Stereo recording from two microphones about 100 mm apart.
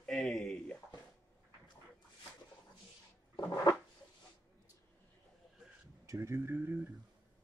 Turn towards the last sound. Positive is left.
turn(degrees=-20)  # may be behind; listen again after turning